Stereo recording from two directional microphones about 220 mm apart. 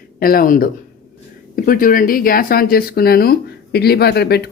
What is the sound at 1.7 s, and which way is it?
Speech, 40° left (ahead or behind).